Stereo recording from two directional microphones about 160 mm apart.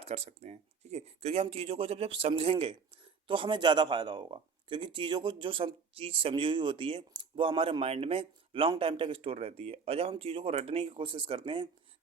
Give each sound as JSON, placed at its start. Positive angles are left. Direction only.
{"t": 0.0, "sound": "speech", "side_deg": -40}